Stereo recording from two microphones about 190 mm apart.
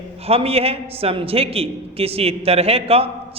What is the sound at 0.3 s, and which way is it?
A man's voice, 30° right (ahead or behind).